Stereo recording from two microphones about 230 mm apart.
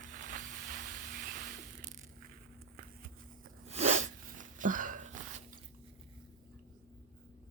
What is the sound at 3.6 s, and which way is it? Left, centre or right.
Sneeze, right.